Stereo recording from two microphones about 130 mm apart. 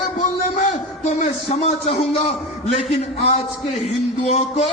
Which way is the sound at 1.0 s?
55° left (ahead or behind).